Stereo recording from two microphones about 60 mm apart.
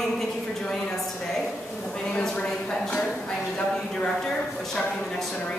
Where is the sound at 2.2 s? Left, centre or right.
Centre.